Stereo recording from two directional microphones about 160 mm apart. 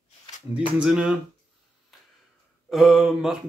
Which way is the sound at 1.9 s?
Centre (ahead or behind).